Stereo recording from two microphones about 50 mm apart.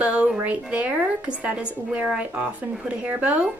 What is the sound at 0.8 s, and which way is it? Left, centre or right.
A woman's voice, right.